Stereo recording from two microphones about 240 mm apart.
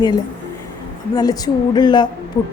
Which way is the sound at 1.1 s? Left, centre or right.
Centre.